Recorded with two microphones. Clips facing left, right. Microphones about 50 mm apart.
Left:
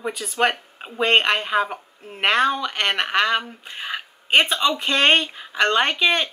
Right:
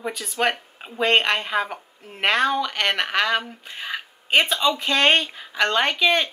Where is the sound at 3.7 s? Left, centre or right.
Centre.